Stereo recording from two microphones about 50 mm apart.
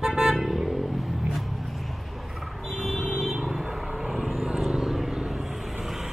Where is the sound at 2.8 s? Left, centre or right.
Left.